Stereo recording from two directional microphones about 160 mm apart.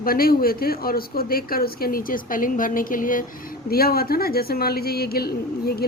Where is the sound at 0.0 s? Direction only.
65° left (ahead or behind).